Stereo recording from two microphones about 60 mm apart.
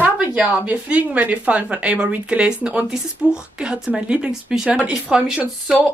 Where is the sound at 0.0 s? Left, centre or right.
Right.